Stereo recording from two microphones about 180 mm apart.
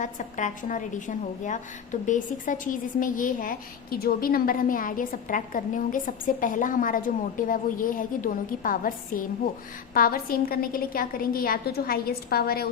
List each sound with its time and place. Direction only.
0.0 s a woman's voice: 45° left (ahead or behind)